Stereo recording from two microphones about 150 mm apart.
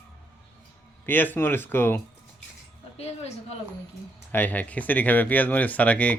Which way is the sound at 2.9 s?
45° left (ahead or behind).